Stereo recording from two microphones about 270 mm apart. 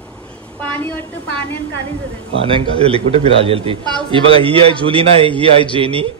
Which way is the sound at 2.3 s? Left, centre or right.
Centre.